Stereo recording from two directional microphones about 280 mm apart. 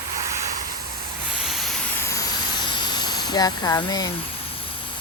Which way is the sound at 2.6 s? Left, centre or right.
Centre.